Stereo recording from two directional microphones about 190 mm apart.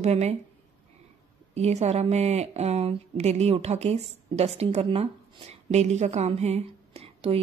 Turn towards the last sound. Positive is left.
turn(degrees=-30)  # may be behind; listen again after turning